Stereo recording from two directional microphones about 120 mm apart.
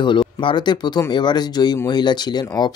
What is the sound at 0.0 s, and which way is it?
Speech, 40° left (ahead or behind).